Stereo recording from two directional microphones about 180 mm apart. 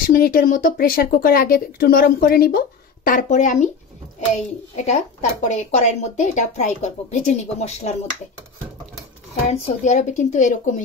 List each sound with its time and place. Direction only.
0.1 s speech: 55° left (ahead or behind)
4.7 s speech: 40° left (ahead or behind)
9.5 s speech: 40° left (ahead or behind)